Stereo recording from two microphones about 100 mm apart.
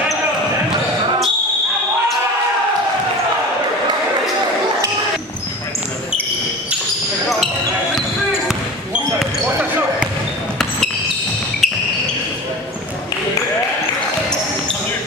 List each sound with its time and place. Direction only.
9.5 s basketball bounce: 15° right (ahead or behind)
11.6 s basketball bounce: centre (ahead or behind)